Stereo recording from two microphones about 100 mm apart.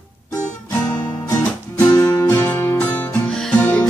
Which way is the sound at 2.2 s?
25° left (ahead or behind).